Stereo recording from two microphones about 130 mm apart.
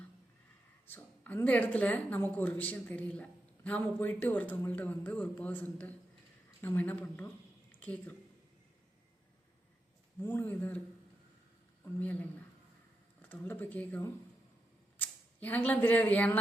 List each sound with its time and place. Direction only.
0.9 s speech: 15° left (ahead or behind)
7.7 s a sound: 10° left (ahead or behind)
10.2 s speech: 15° left (ahead or behind)
11.9 s speech: 10° left (ahead or behind)